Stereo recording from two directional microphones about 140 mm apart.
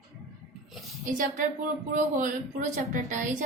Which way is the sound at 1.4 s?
70° right (ahead or behind).